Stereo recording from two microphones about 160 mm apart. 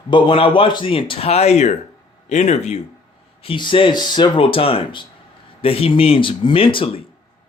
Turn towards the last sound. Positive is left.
turn(degrees=35)  # may be behind; listen again after turning